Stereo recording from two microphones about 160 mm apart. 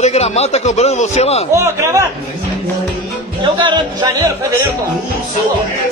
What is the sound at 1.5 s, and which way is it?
Speech, 20° right (ahead or behind).